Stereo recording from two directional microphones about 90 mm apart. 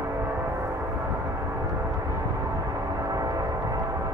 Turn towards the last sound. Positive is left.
turn(degrees=-45)  # may be behind; listen again after turning